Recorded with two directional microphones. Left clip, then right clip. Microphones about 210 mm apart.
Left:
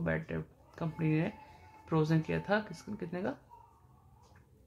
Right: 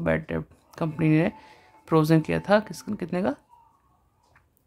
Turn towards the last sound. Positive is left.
turn(degrees=-40)  # may be behind; listen again after turning